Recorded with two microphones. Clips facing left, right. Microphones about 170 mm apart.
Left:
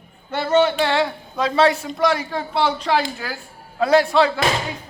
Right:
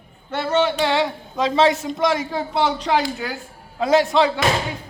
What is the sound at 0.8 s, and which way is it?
Speech, 15° right (ahead or behind).